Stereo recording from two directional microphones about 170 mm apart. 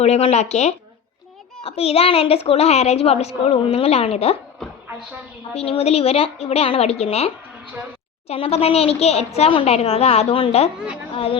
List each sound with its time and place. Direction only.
0.0 s a woman's voice: 40° left (ahead or behind)
4.6 s a sound: centre (ahead or behind)
5.5 s a woman's voice: 35° left (ahead or behind)